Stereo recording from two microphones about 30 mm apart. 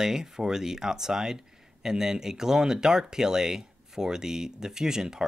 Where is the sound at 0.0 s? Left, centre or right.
Centre.